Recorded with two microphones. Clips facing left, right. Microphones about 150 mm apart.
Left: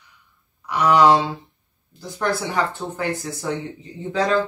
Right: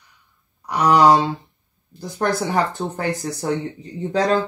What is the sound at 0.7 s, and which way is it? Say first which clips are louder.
Speech: right 1 dB; 40° right (ahead or behind).